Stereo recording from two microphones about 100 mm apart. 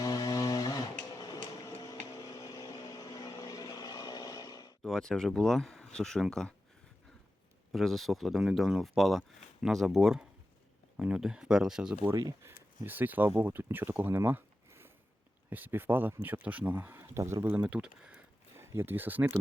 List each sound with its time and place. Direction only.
0.0 s music: 45° left (ahead or behind)
4.8 s speech: 5° left (ahead or behind)
7.7 s speech: centre (ahead or behind)
12.1 s speech: 30° right (ahead or behind)
12.8 s speech: 20° right (ahead or behind)
18.5 s speech: 25° right (ahead or behind)